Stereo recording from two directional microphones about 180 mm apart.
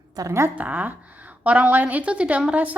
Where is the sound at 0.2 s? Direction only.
15° right (ahead or behind).